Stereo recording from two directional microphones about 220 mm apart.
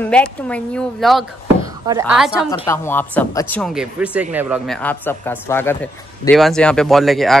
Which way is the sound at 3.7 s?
5° right (ahead or behind).